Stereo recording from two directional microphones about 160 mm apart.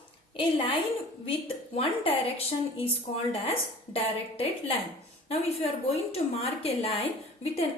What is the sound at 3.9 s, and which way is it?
Speech, 35° left (ahead or behind).